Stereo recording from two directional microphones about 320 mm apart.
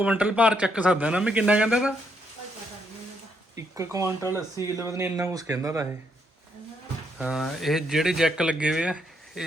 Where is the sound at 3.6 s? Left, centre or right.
Centre.